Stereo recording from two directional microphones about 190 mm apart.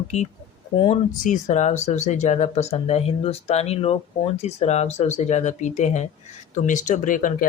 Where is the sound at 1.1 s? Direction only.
40° left (ahead or behind).